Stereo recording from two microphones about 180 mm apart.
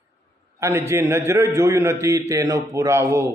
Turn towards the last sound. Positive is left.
turn(degrees=-15)  # may be behind; listen again after turning